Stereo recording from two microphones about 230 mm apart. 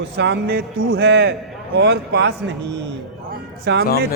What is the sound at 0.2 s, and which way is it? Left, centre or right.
A man's voice, right.